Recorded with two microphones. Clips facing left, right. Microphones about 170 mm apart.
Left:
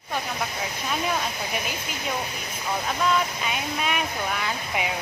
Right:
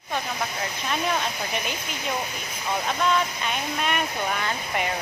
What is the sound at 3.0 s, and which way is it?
A man's voice, 5° left (ahead or behind).